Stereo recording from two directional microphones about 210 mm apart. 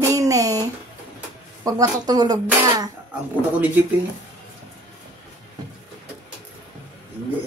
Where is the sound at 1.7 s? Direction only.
15° right (ahead or behind).